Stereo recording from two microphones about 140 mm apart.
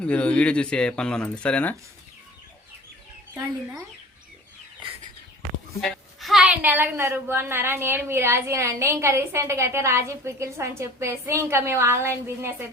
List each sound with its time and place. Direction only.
0.0 s speech: 10° left (ahead or behind)
5.8 s a woman's voice: centre (ahead or behind); by 12.6 s 15° right (ahead or behind)